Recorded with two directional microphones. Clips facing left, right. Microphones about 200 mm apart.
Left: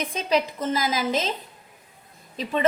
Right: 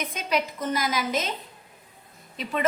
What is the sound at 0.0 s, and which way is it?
A woman's voice, 30° left (ahead or behind).